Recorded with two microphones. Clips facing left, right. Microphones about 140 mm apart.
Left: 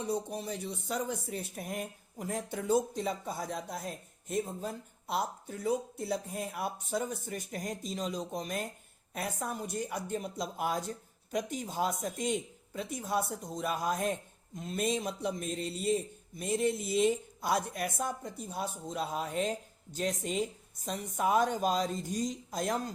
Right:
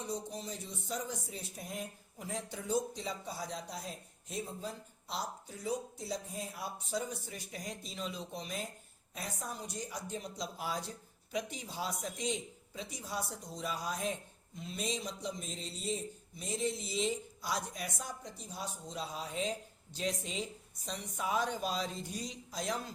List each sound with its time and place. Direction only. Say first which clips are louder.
0.0 s speech: left 6 dB; 60° left (ahead or behind)